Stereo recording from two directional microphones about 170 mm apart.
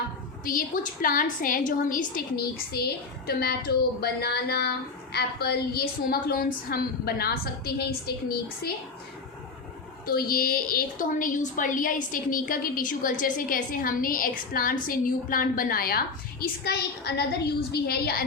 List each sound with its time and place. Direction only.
1.0 s a woman's voice: 55° left (ahead or behind)
10.1 s a woman's voice: 60° left (ahead or behind)